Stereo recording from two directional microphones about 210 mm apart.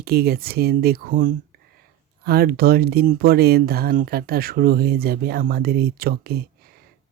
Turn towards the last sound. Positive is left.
turn(degrees=-45)  # may be behind; listen again after turning